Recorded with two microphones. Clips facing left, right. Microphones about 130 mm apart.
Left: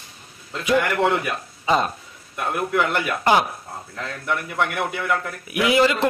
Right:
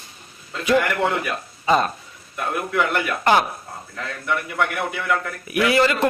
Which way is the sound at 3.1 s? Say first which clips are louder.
Right 1 dB; 15° left (ahead or behind).